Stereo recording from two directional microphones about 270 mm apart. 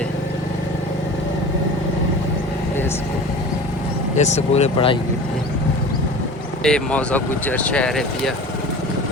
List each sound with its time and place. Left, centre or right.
4.2 s speech: left
6.6 s speech: centre